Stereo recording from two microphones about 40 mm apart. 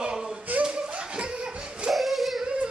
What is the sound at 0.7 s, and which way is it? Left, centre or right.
Laughter, right.